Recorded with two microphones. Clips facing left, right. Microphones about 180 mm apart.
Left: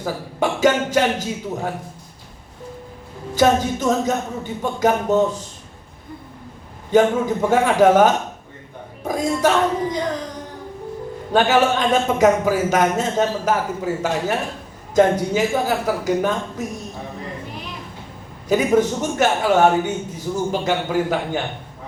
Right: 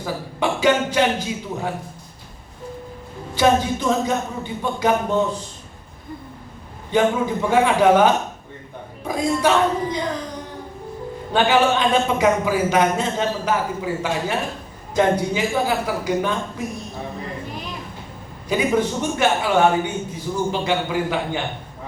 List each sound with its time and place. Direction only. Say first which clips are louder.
0.0 s speech: left 1 dB; 45° left (ahead or behind)
3.3 s speech: left 1 dB; 45° left (ahead or behind)
6.9 s speech: left 3 dB; 45° left (ahead or behind)
11.3 s speech: left 1 dB; 45° left (ahead or behind)
18.4 s speech: left 3 dB; 45° left (ahead or behind)